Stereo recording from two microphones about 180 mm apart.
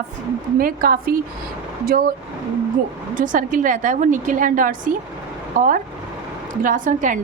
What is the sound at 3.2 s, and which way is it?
A woman's voice, 45° right (ahead or behind).